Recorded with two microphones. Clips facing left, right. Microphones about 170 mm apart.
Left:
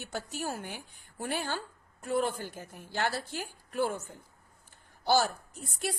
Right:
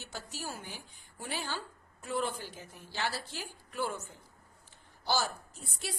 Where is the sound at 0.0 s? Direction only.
55° left (ahead or behind).